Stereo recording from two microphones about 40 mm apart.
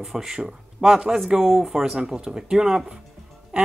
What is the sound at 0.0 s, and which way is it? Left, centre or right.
Speech, centre.